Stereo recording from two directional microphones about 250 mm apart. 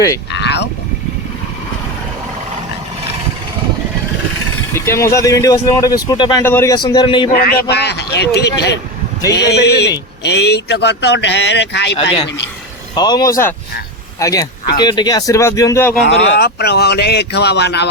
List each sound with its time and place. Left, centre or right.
0.3 s boat: left
4.7 s speech: centre
7.3 s speech: left
13.0 s speech: centre
16.0 s speech: left